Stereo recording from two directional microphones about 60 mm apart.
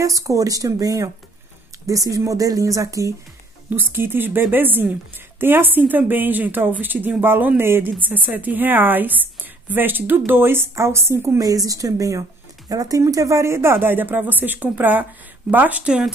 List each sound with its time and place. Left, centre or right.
0.0 s speech: right
3.7 s a woman's voice: right
11.3 s speech: right
13.0 s a woman's voice: right; by 16.1 s centre